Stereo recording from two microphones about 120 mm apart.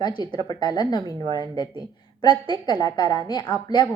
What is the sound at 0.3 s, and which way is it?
Speech, 35° left (ahead or behind).